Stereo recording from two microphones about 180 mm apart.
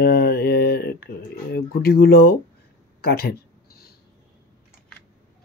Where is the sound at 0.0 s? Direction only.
60° left (ahead or behind).